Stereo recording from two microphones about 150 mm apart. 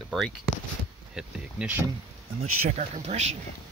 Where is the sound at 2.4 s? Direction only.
45° right (ahead or behind).